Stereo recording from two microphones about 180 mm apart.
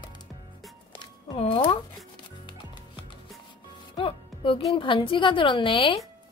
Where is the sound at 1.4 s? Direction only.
30° left (ahead or behind).